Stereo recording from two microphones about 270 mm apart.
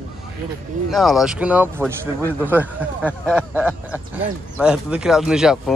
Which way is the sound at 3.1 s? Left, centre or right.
Centre.